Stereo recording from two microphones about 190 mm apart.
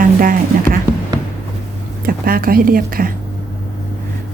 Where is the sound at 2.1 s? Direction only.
50° right (ahead or behind).